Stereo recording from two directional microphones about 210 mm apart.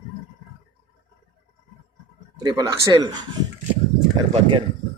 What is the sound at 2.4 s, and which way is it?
Speech, 20° right (ahead or behind).